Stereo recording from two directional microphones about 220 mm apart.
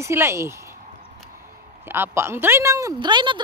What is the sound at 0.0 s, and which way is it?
Speech, 10° right (ahead or behind).